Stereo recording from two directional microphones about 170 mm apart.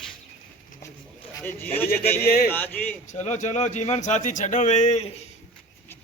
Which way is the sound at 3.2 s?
45° left (ahead or behind).